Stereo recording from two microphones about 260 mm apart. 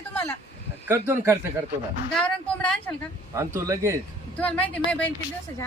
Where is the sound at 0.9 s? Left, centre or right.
Centre.